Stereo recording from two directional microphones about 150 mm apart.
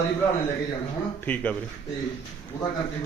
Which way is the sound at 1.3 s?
10° left (ahead or behind).